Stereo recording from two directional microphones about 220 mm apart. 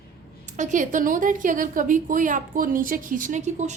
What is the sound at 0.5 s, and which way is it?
A woman's voice, 35° right (ahead or behind).